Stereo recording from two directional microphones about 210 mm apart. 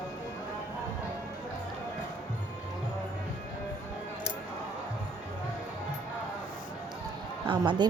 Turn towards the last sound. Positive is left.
turn(degrees=-20)  # may be behind; listen again after turning